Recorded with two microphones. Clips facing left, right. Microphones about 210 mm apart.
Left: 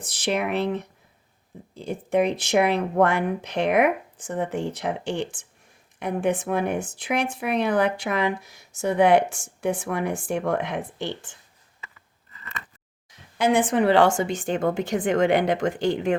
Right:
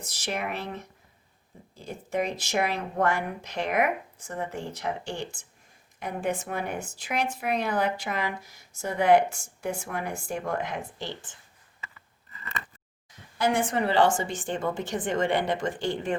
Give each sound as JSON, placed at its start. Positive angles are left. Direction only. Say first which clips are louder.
{"t": 0.0, "sound": "speech", "louder": "left 7 dB", "side_deg": 75}
{"t": 13.4, "sound": "speech", "louder": "left 5 dB", "side_deg": 75}